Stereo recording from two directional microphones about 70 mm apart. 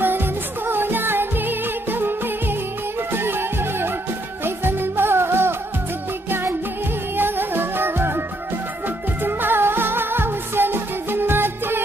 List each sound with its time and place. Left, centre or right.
0.0 s music: right
7.2 s music: right